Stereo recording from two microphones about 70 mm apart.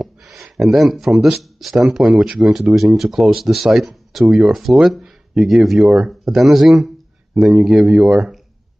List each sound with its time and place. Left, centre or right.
0.0 s speech: centre